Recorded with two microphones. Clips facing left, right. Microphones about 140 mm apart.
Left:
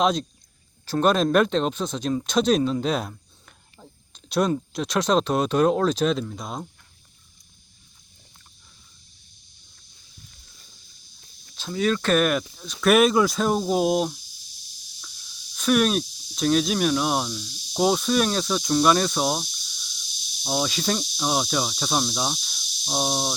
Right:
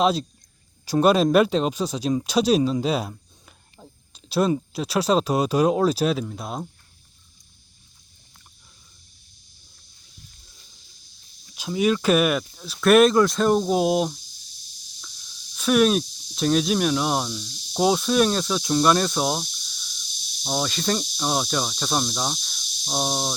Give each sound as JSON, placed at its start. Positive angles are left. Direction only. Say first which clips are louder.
{"t": 0.0, "sound": "speech", "louder": "right 1 dB", "side_deg": -5}
{"t": 11.5, "sound": "speech", "louder": "right 2 dB", "side_deg": -15}
{"t": 15.5, "sound": "speech", "louder": "right 2 dB", "side_deg": 0}